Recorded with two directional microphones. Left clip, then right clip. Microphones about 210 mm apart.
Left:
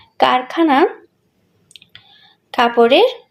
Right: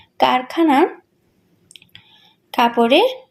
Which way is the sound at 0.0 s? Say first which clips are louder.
Left 2 dB; 5° right (ahead or behind).